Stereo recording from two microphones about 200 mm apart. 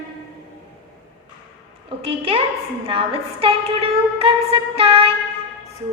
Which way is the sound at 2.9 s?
25° right (ahead or behind).